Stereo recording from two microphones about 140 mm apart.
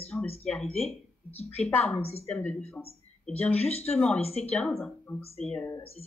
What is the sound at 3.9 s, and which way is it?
Speech, 5° left (ahead or behind).